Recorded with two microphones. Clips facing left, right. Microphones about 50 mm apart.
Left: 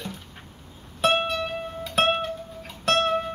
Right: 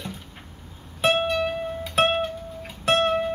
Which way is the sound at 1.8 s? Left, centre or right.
Centre.